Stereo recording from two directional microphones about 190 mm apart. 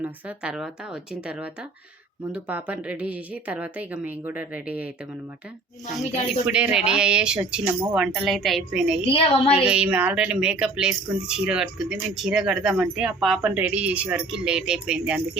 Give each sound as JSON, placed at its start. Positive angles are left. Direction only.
{"t": 0.0, "sound": "a woman's voice", "side_deg": -5}
{"t": 6.1, "sound": "speech", "side_deg": -5}
{"t": 9.0, "sound": "a woman's voice", "side_deg": 30}
{"t": 9.6, "sound": "speech", "side_deg": -5}